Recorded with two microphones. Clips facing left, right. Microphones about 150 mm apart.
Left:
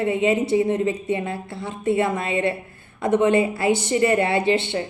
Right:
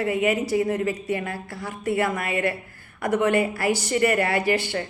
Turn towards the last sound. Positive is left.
turn(degrees=25)  # may be behind; listen again after turning